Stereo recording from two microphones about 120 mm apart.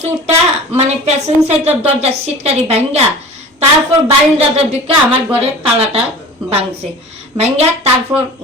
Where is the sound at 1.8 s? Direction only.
60° right (ahead or behind).